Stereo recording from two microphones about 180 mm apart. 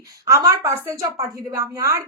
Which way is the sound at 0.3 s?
15° right (ahead or behind).